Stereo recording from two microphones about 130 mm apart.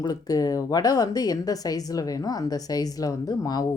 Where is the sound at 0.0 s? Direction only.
30° left (ahead or behind).